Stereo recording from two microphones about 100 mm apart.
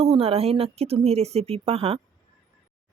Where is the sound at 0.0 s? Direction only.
80° right.